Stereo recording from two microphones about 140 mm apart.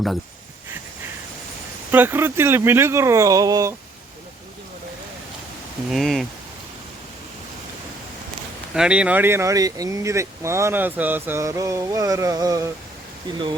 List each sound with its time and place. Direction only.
1.9 s speech: 15° right (ahead or behind)
5.9 s speech: centre (ahead or behind)
8.7 s speech: 5° right (ahead or behind); by 12.6 s 25° right (ahead or behind)